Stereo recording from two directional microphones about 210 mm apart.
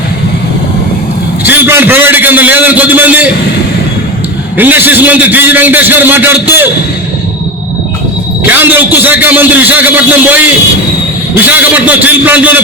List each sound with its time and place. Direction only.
1.5 s a man's voice: 10° right (ahead or behind)
4.5 s a man's voice: 10° right (ahead or behind)
8.4 s a man's voice: 10° right (ahead or behind)